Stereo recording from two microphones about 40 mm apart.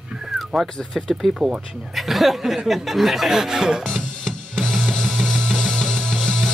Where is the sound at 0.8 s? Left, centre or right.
Centre.